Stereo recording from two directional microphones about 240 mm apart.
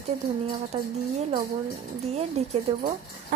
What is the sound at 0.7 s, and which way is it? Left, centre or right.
Speech, right.